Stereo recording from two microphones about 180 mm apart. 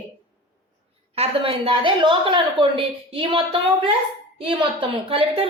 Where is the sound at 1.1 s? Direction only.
30° right (ahead or behind).